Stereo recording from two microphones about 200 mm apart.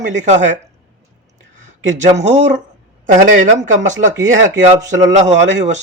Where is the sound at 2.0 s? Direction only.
35° right (ahead or behind).